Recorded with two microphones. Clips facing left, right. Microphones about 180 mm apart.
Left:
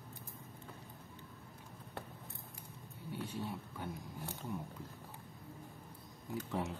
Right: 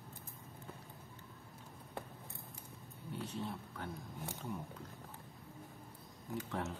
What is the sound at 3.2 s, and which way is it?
Speech, 10° left (ahead or behind).